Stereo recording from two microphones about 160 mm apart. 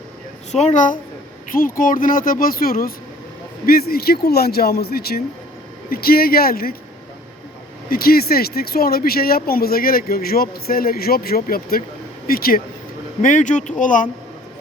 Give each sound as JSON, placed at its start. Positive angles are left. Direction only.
{"t": 0.5, "sound": "speech", "side_deg": 50}
{"t": 1.5, "sound": "speech", "side_deg": 60}
{"t": 7.9, "sound": "speech", "side_deg": 70}
{"t": 13.2, "sound": "speech", "side_deg": 50}